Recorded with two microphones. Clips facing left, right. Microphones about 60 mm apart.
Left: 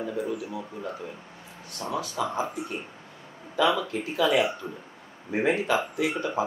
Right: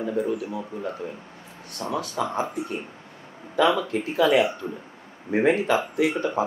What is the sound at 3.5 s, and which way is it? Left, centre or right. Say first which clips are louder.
Speech: right 3 dB; right.